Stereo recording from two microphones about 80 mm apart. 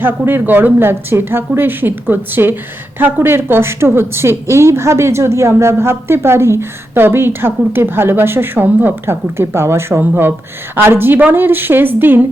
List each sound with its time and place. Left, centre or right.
0.0 s a woman's voice: right